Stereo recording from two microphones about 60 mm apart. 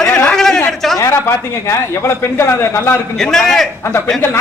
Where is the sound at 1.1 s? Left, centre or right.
Left.